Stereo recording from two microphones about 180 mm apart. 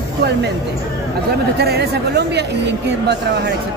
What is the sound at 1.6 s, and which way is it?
Speech, 65° right (ahead or behind).